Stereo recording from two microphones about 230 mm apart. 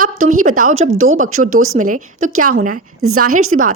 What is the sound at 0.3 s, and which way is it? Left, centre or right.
Speech, right.